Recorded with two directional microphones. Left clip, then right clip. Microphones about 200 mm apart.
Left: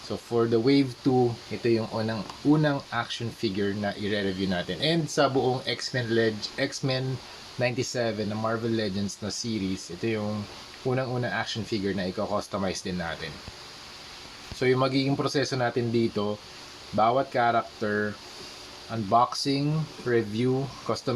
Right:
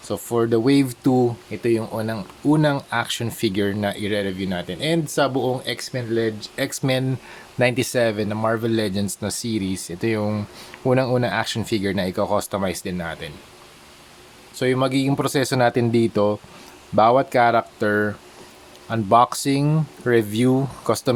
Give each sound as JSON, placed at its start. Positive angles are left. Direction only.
{"t": 0.1, "sound": "speech", "side_deg": -35}
{"t": 1.6, "sound": "speech", "side_deg": -25}
{"t": 14.6, "sound": "speech", "side_deg": -30}